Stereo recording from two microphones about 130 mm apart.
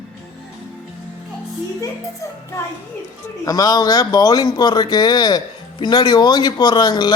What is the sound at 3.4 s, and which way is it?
Speech, 30° left (ahead or behind).